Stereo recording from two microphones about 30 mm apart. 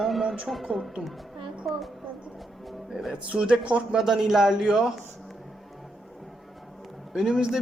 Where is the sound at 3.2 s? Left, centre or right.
Right.